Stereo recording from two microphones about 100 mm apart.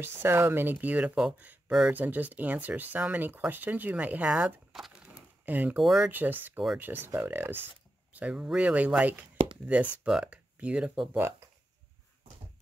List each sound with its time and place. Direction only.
0.0 s speech: 25° right (ahead or behind); by 5.1 s 5° right (ahead or behind)
5.1 s a sound: 20° right (ahead or behind)
5.8 s speech: centre (ahead or behind)
6.0 s speech: 20° right (ahead or behind)